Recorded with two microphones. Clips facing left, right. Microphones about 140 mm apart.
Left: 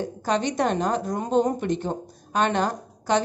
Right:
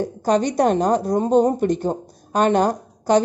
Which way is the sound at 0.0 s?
40° right (ahead or behind).